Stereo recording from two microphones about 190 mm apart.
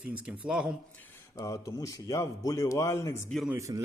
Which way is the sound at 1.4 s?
20° left (ahead or behind).